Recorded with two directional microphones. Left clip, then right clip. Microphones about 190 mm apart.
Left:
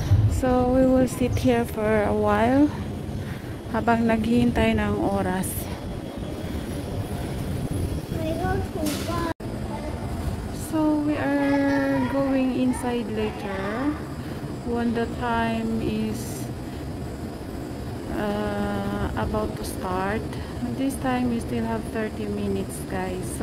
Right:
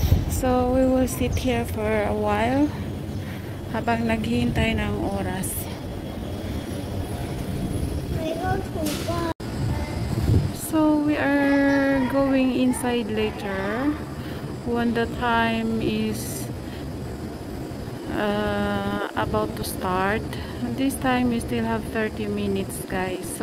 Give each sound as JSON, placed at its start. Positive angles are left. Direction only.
{"t": 0.4, "sound": "a woman's voice", "side_deg": 15}
{"t": 3.7, "sound": "speech", "side_deg": 20}
{"t": 4.3, "sound": "speech", "side_deg": 30}
{"t": 10.7, "sound": "a sound", "side_deg": -5}
{"t": 14.8, "sound": "speech", "side_deg": -5}
{"t": 18.1, "sound": "speech", "side_deg": -5}